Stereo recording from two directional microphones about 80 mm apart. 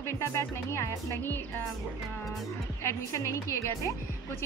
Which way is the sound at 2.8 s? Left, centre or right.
Left.